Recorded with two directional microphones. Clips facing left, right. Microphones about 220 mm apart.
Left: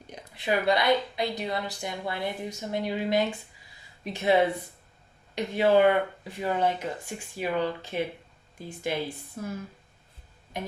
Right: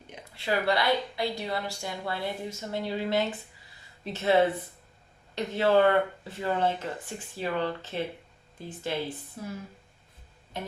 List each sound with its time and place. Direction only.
0.3 s speech: 15° left (ahead or behind)
9.4 s speech: 50° left (ahead or behind)
10.5 s music: 15° left (ahead or behind)